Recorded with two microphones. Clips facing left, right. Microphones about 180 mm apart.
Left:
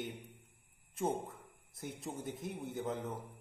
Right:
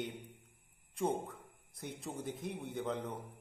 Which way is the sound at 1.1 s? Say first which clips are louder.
Right 1 dB; 25° left (ahead or behind).